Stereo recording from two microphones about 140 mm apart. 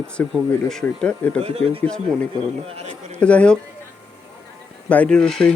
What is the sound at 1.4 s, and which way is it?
Speech, 45° right (ahead or behind).